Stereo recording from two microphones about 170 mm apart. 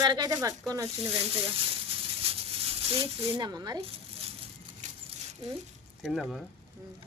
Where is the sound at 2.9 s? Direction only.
35° right (ahead or behind).